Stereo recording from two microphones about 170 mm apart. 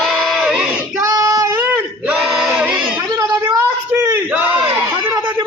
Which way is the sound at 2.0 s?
5° right (ahead or behind).